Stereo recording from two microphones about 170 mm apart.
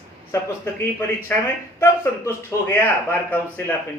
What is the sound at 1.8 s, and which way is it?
Speech, 15° left (ahead or behind).